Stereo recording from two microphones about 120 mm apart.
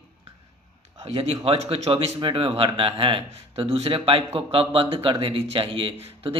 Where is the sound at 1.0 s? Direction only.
55° right (ahead or behind).